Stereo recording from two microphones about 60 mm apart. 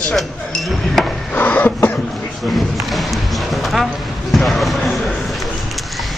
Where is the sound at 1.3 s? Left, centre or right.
Left.